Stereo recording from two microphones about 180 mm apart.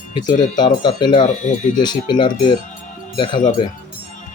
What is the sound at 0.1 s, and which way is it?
Speech, 25° left (ahead or behind).